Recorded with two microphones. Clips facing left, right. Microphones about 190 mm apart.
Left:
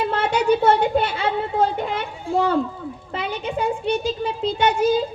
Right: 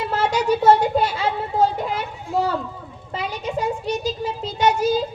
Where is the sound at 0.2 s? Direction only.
55° left (ahead or behind).